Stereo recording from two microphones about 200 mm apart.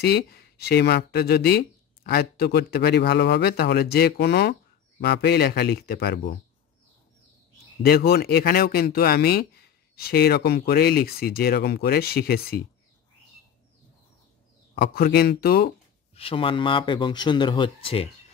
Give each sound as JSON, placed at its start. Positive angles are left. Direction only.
{"t": 0.0, "sound": "speech", "side_deg": 50}
{"t": 7.8, "sound": "speech", "side_deg": 50}
{"t": 14.8, "sound": "speech", "side_deg": 55}
{"t": 16.2, "sound": "speech", "side_deg": 25}